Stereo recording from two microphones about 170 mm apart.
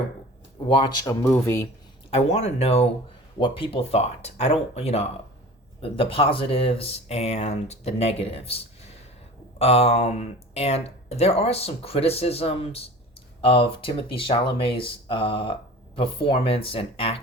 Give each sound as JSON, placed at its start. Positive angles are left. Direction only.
{"t": 0.7, "sound": "speech", "side_deg": 30}
{"t": 2.0, "sound": "speech", "side_deg": 40}